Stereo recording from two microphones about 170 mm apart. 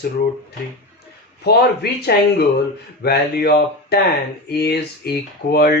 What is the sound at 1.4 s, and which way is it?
Speech, 75° left (ahead or behind).